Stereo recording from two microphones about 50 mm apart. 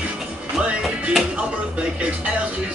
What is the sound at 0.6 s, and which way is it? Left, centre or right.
Music, right.